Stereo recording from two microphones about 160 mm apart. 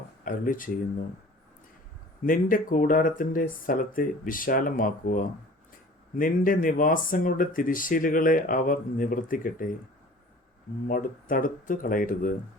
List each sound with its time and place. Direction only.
0.3 s speech: 60° left (ahead or behind)
2.2 s speech: 60° left (ahead or behind)
10.8 s speech: 60° left (ahead or behind)